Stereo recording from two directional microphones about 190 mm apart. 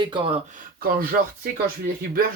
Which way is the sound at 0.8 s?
50° right (ahead or behind).